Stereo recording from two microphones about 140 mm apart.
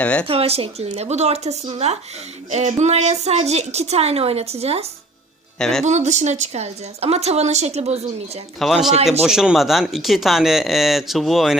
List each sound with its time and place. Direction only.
0.0 s speech: 10° left (ahead or behind)
0.3 s a woman's voice: 45° right (ahead or behind)
5.5 s speech: 5° left (ahead or behind)
5.8 s a woman's voice: 55° right (ahead or behind)
8.5 s speech: centre (ahead or behind)